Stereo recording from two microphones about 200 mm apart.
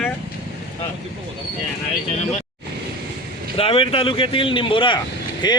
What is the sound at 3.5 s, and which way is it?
Speech, 30° left (ahead or behind).